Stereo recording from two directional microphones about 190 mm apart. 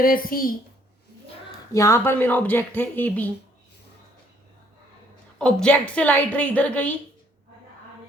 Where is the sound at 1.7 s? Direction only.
15° left (ahead or behind).